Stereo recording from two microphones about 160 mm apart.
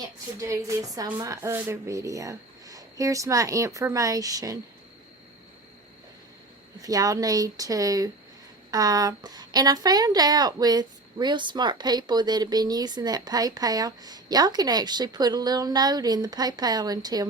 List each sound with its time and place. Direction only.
0.3 s a woman's voice: 20° right (ahead or behind)
6.8 s a woman's voice: 20° right (ahead or behind)